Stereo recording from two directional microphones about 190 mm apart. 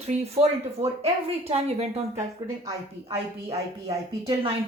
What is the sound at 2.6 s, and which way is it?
Speech, 20° right (ahead or behind).